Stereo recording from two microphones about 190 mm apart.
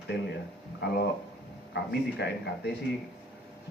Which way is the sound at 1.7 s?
60° left (ahead or behind).